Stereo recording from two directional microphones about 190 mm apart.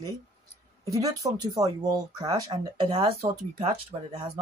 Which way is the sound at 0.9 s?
20° right (ahead or behind).